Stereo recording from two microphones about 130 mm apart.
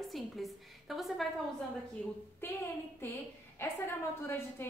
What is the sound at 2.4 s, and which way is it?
A woman's voice, 15° left (ahead or behind).